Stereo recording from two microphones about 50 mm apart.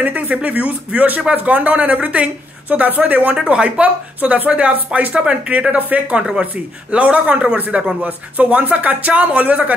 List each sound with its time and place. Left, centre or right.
0.0 s speech: right